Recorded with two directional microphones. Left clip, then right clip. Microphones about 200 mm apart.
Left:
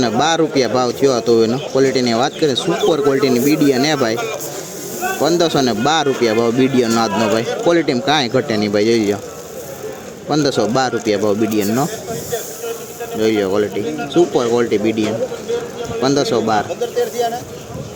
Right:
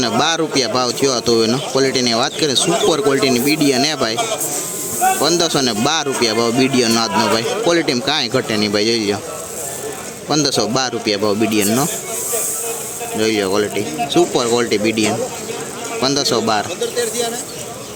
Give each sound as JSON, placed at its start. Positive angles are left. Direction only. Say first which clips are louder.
{"t": 0.0, "sound": "speech", "louder": "left 1 dB", "side_deg": 10}
{"t": 2.6, "sound": "speech", "louder": "right 1 dB", "side_deg": -20}
{"t": 3.1, "sound": "speech", "louder": "left 1 dB", "side_deg": 5}
{"t": 5.2, "sound": "speech", "louder": "left 1 dB", "side_deg": 10}
{"t": 10.2, "sound": "speech", "louder": "left 1 dB", "side_deg": 10}
{"t": 13.1, "sound": "speech", "louder": "left 1 dB", "side_deg": 5}